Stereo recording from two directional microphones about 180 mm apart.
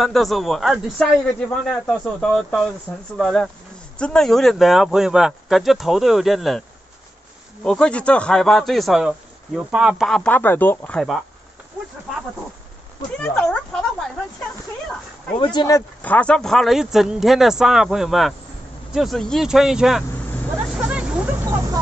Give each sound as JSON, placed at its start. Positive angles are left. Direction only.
{"t": 0.0, "sound": "speech", "side_deg": 0}
{"t": 7.6, "sound": "speech", "side_deg": 5}
{"t": 13.2, "sound": "speech", "side_deg": 5}
{"t": 15.3, "sound": "speech", "side_deg": 25}
{"t": 16.0, "sound": "speech", "side_deg": 10}
{"t": 20.7, "sound": "a sound", "side_deg": -5}